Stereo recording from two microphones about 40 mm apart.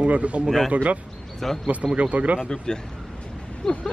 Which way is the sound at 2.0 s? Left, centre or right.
Right.